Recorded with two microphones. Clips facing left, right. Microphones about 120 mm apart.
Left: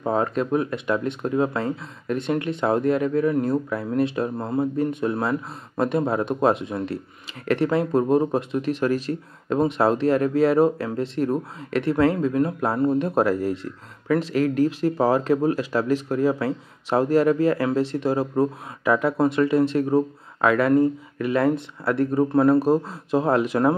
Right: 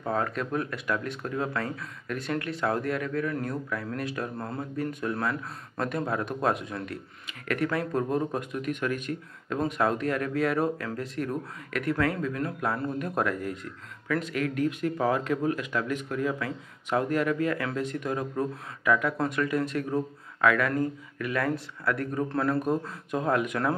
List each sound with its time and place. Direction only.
0.0 s speech: 25° left (ahead or behind)